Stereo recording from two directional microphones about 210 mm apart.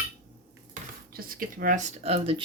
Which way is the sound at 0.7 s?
45° right (ahead or behind).